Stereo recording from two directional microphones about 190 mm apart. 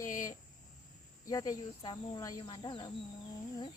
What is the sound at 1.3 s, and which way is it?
Speech, 20° left (ahead or behind).